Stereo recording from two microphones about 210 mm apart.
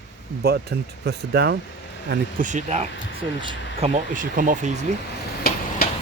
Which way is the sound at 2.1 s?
40° right (ahead or behind).